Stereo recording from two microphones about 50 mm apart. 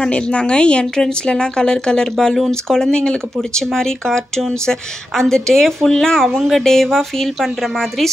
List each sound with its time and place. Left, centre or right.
0.0 s a woman's voice: left